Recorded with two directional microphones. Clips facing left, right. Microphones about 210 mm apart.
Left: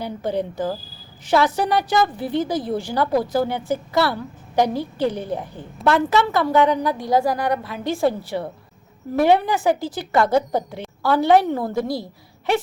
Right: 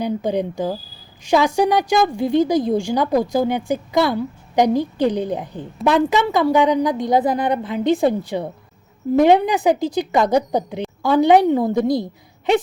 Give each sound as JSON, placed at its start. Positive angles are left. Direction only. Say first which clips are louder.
{"t": 0.0, "sound": "a woman's voice", "louder": "right 4 dB", "side_deg": -15}